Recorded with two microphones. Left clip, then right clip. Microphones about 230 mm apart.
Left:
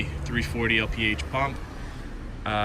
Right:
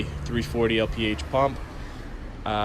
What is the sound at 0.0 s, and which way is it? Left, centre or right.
Speech, centre.